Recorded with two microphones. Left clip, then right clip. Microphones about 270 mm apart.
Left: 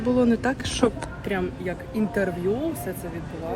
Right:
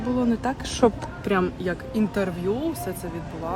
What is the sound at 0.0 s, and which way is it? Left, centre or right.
Speech, centre.